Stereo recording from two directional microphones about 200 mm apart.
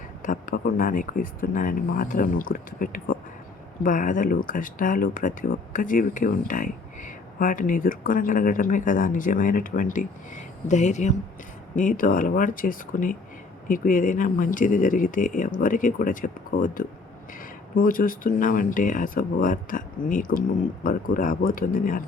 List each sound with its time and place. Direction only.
0.2 s speech: 40° left (ahead or behind)